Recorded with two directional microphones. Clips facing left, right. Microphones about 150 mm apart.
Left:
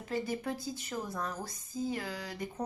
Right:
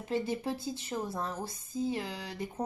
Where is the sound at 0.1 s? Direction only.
25° right (ahead or behind).